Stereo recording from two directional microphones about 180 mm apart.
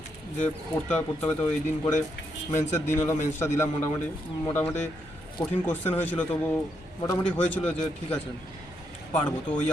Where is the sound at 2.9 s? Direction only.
15° left (ahead or behind).